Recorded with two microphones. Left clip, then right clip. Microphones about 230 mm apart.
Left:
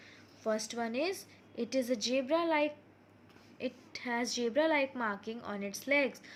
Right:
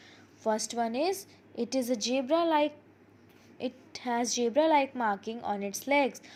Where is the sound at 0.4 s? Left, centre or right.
Centre.